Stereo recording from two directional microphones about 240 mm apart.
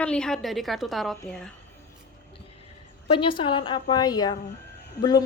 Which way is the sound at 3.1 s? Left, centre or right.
Left.